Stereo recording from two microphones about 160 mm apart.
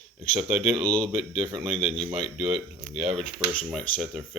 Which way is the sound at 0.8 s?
5° left (ahead or behind).